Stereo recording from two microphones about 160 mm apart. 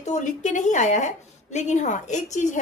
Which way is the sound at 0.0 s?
50° left (ahead or behind).